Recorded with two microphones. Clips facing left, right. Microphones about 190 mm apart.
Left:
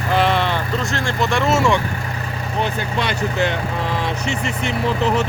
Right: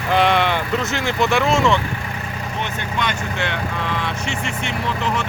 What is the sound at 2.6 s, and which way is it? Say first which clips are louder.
Speech: left 2 dB; 35° left (ahead or behind).